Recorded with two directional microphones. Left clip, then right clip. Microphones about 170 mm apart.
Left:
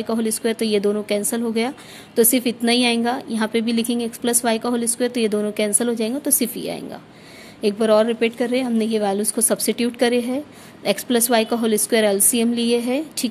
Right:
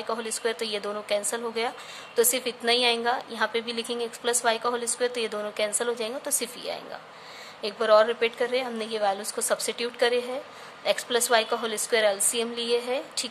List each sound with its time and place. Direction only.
0.0 s a woman's voice: 30° left (ahead or behind)